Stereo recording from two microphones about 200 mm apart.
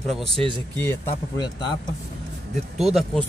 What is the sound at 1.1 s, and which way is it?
Speech, 20° left (ahead or behind).